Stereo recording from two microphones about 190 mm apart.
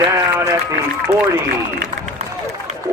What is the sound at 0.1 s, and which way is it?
Run, 15° right (ahead or behind).